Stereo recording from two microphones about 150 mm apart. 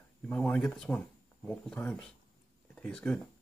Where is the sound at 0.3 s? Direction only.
5° left (ahead or behind).